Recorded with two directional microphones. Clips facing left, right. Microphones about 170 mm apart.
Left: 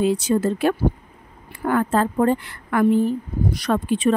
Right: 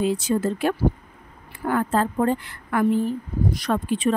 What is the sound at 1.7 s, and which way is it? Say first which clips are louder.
Speech: left 2 dB; 70° left (ahead or behind).